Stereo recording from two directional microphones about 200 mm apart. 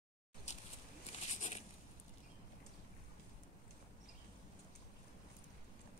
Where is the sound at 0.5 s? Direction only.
35° left (ahead or behind).